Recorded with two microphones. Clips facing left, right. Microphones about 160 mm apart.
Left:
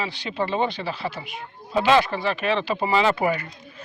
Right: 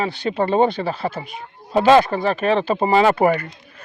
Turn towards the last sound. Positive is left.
turn(degrees=-45)  # may be behind; listen again after turning